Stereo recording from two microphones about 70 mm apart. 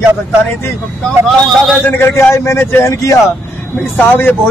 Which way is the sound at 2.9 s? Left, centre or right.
Left.